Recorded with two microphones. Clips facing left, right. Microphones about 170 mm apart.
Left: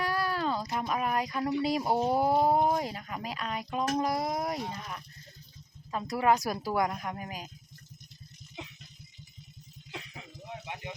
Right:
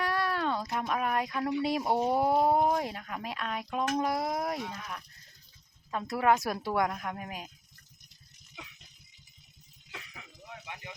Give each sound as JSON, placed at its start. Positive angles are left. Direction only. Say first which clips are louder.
{"t": 0.0, "sound": "speech", "louder": "even", "side_deg": 0}
{"t": 5.9, "sound": "speech", "louder": "even", "side_deg": 0}
{"t": 9.9, "sound": "a sound", "louder": "left 4 dB", "side_deg": 25}